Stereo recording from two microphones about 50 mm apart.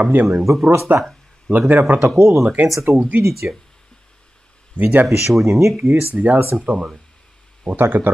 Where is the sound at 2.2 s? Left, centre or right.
Right.